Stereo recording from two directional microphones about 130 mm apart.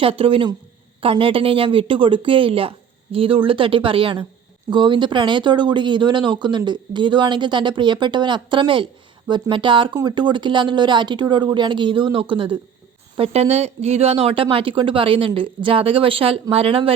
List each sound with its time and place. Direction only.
0.0 s a woman's voice: 45° right (ahead or behind)